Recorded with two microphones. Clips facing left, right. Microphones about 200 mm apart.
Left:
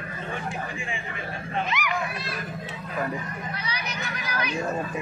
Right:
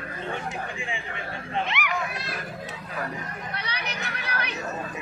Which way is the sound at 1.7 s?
65° right (ahead or behind).